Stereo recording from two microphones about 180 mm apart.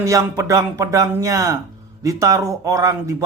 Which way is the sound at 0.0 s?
15° right (ahead or behind).